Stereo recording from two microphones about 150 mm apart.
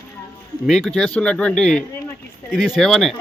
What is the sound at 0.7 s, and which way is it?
A man's voice, centre (ahead or behind).